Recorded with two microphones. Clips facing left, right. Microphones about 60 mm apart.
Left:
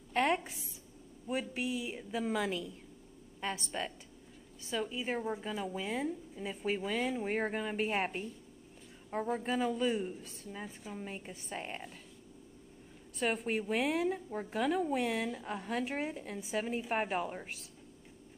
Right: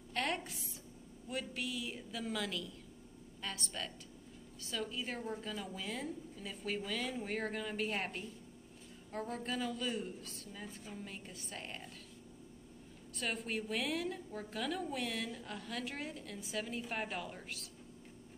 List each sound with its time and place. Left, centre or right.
0.1 s a woman's voice: left
13.5 s a woman's voice: left